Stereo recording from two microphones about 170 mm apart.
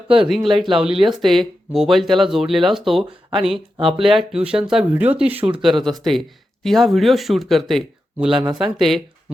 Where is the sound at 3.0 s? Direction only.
30° right (ahead or behind).